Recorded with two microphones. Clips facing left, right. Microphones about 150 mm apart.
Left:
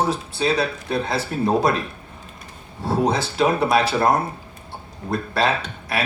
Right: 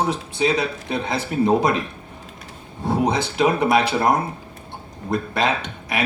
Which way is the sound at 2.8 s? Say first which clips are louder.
Even; 15° right (ahead or behind).